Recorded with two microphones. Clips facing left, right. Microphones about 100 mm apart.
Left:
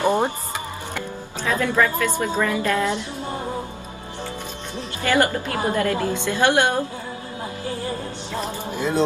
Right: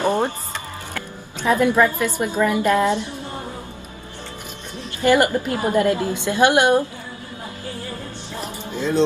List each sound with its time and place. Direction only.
0.0 s music: 15° left (ahead or behind)
1.4 s a woman's voice: 20° right (ahead or behind)
5.0 s a woman's voice: 15° right (ahead or behind)